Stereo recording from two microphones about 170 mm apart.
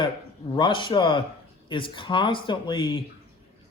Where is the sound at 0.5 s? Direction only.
30° left (ahead or behind).